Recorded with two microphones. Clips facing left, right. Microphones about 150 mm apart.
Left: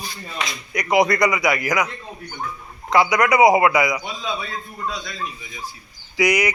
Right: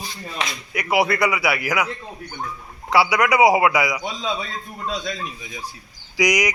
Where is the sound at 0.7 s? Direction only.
5° right (ahead or behind).